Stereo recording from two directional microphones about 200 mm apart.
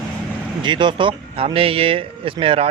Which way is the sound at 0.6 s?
25° right (ahead or behind).